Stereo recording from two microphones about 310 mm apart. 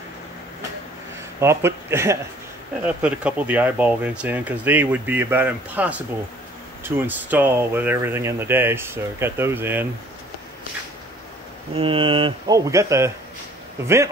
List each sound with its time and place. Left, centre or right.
1.4 s speech: centre
11.7 s speech: centre